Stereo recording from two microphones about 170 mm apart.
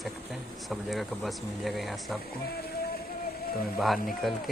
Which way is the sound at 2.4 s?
65° left (ahead or behind).